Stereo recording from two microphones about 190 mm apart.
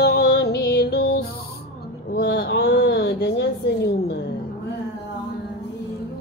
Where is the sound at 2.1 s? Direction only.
60° left (ahead or behind).